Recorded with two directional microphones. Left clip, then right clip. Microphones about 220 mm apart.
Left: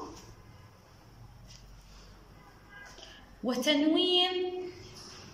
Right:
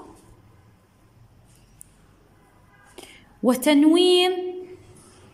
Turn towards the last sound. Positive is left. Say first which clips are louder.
# right 9 dB
turn(degrees=-55)  # may be behind; listen again after turning